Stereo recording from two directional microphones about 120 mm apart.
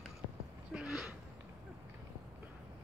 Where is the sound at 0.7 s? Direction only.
5° right (ahead or behind).